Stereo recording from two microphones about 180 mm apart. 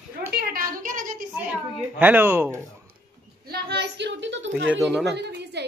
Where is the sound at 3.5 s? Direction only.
65° right (ahead or behind); by 4.7 s 90° right.